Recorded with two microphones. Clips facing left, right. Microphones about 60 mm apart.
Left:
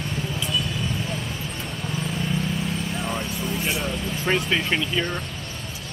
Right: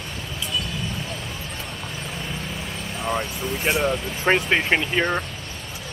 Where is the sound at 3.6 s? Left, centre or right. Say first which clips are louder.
Right 8 dB; right.